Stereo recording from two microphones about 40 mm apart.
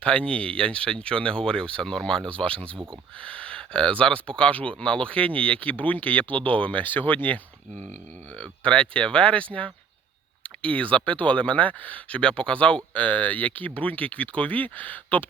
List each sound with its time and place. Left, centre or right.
0.0 s speech: left
3.2 s speech: left
8.4 s speech: left